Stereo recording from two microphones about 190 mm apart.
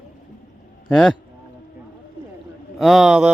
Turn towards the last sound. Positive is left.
turn(degrees=-5)  # may be behind; listen again after turning